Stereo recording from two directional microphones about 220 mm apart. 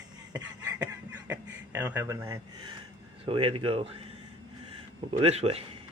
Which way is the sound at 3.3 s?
25° right (ahead or behind).